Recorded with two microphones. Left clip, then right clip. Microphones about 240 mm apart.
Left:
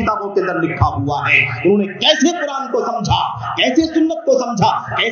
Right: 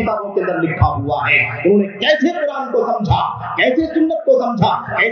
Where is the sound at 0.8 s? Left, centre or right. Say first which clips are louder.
Even; left.